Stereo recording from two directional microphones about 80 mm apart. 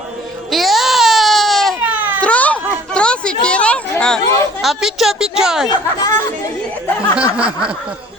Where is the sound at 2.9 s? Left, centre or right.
Centre.